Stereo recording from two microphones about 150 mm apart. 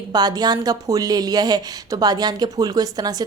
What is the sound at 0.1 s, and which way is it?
Speech, 25° right (ahead or behind).